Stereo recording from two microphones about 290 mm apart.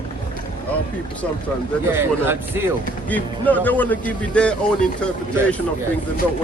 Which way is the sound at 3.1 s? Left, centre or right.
Centre.